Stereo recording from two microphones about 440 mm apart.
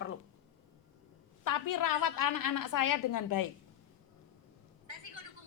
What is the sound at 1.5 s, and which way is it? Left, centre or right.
A woman's voice, left.